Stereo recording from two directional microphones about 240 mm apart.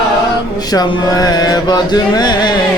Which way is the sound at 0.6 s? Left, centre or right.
Centre.